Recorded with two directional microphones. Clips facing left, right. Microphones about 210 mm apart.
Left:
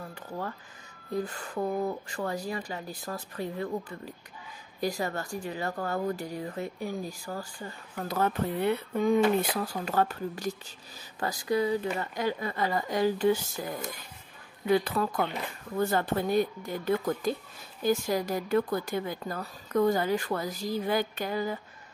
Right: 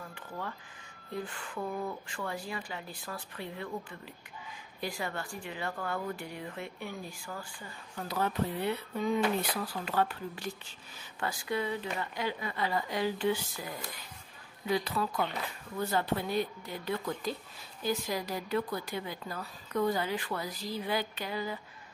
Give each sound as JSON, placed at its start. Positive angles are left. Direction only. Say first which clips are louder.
{"t": 0.1, "sound": "a sound", "louder": "left 6 dB", "side_deg": 40}
{"t": 1.1, "sound": "speech", "louder": "left 6 dB", "side_deg": 40}
{"t": 7.9, "sound": "speech", "louder": "left 4 dB", "side_deg": 50}